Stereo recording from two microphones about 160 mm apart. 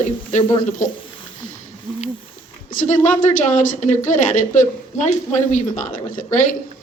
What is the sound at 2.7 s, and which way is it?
A woman's voice, 50° left (ahead or behind).